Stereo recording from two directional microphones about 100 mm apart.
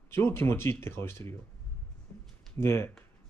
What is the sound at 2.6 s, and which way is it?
Speech, 25° left (ahead or behind).